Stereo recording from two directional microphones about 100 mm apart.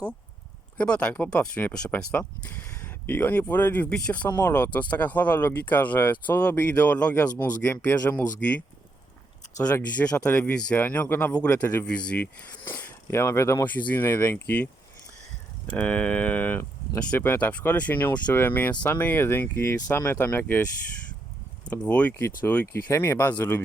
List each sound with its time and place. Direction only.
0.8 s speech: 10° left (ahead or behind)
9.6 s speech: 35° left (ahead or behind)
10.0 s speech: 10° left (ahead or behind)
15.7 s speech: 10° left (ahead or behind)